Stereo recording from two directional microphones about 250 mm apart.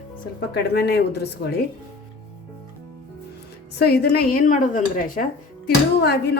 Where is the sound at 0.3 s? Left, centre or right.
Left.